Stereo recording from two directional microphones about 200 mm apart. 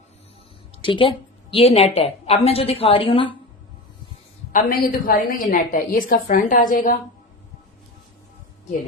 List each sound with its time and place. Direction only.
0.8 s a woman's voice: 25° left (ahead or behind)
4.5 s a woman's voice: 45° left (ahead or behind)